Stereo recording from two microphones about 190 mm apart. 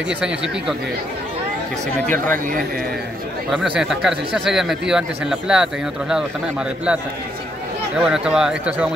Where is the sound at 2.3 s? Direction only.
45° right (ahead or behind).